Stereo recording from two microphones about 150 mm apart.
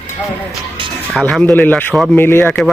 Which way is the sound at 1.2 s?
Centre (ahead or behind).